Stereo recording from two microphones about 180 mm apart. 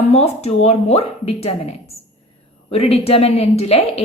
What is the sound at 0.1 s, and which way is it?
A woman's voice, 35° left (ahead or behind).